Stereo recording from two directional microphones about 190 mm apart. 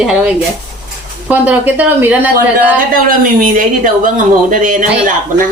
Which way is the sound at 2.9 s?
45° right (ahead or behind).